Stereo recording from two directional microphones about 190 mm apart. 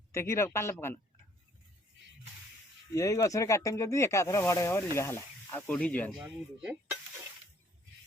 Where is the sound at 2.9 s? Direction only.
15° left (ahead or behind).